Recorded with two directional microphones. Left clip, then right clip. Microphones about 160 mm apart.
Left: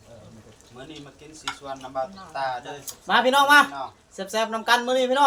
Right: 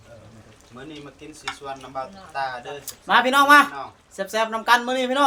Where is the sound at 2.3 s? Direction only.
25° right (ahead or behind).